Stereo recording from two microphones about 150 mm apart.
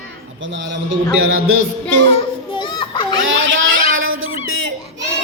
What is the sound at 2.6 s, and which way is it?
Children playing, 30° left (ahead or behind).